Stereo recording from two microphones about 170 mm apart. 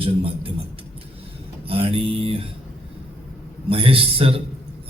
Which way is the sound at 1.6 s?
35° right (ahead or behind).